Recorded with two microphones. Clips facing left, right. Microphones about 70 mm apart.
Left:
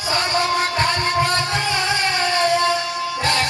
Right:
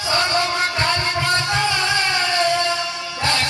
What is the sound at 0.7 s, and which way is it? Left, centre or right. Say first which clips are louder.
Music: left 2 dB; left.